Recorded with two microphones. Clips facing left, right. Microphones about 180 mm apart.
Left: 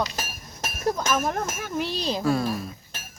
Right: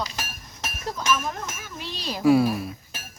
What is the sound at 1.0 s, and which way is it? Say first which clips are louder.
Speech: left 2 dB; 45° left (ahead or behind).